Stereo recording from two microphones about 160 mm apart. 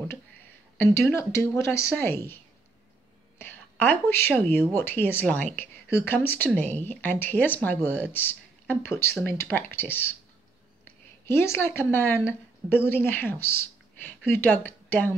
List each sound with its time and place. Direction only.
0.7 s speech: 15° left (ahead or behind)
3.3 s a woman's voice: 10° left (ahead or behind)
11.2 s a woman's voice: 15° left (ahead or behind)